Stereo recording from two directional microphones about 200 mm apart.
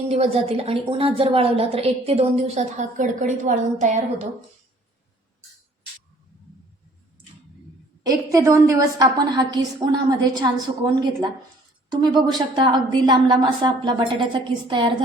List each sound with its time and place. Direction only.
0.1 s a woman's voice: 30° right (ahead or behind)
8.0 s a woman's voice: 15° right (ahead or behind)
11.9 s a woman's voice: 20° right (ahead or behind)